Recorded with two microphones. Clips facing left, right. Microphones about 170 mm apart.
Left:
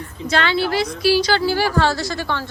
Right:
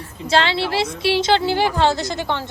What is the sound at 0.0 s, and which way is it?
A woman's voice, 30° right (ahead or behind).